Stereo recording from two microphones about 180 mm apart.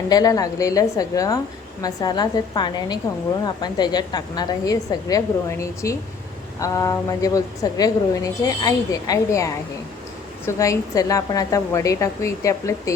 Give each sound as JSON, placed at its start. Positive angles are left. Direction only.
{"t": 0.1, "sound": "a woman's voice", "side_deg": 20}